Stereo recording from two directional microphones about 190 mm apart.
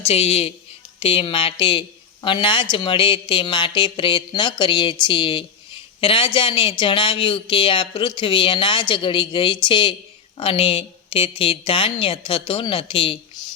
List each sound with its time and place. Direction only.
0.0 s a woman's voice: 30° left (ahead or behind)